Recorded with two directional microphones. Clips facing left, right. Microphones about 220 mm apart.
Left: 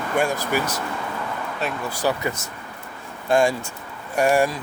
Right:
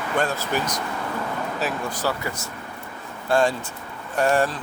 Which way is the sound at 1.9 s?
15° left (ahead or behind).